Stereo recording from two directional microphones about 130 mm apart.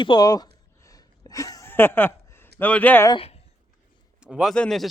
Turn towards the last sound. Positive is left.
turn(degrees=5)  # may be behind; listen again after turning